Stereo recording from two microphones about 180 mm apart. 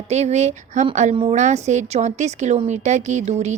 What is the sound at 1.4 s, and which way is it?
A woman's voice, 40° right (ahead or behind).